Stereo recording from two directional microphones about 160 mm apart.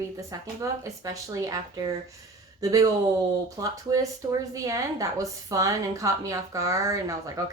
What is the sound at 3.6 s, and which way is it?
A woman's voice, 20° right (ahead or behind).